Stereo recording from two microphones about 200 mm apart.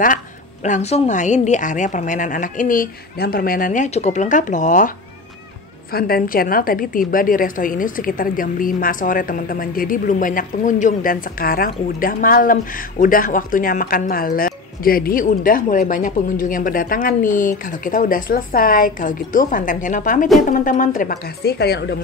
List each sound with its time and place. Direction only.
0.7 s a woman's voice: 35° left (ahead or behind)
5.9 s speech: 50° left (ahead or behind)